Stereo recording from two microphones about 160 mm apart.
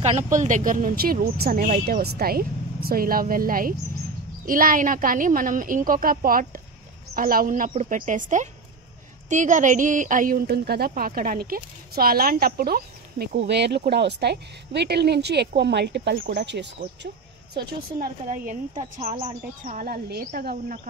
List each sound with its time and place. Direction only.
0.3 s a woman's voice: 50° right (ahead or behind); by 13.4 s 70° right (ahead or behind)
13.5 s speech: 90° right
17.6 s a woman's voice: 80° right; by 18.9 s 55° right (ahead or behind)
18.9 s speech: 40° right (ahead or behind)
19.6 s a woman's voice: 55° right (ahead or behind)